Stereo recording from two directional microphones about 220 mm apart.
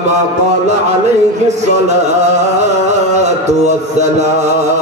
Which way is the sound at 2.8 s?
30° right (ahead or behind).